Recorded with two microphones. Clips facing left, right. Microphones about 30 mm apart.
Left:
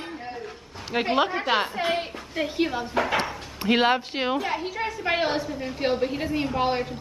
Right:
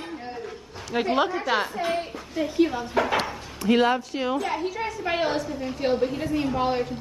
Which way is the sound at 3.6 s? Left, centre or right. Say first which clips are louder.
Even; left.